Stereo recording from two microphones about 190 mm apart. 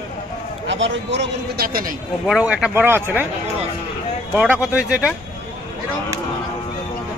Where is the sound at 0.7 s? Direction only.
75° right (ahead or behind); by 2.0 s 50° right (ahead or behind).